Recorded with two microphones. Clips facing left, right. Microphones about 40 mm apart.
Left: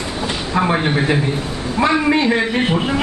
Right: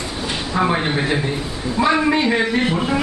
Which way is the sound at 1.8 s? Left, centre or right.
Left.